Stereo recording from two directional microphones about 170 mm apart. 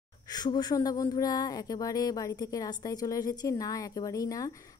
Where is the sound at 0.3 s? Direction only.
25° left (ahead or behind).